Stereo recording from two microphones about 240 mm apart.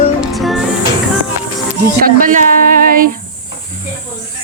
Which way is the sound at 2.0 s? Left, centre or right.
Right.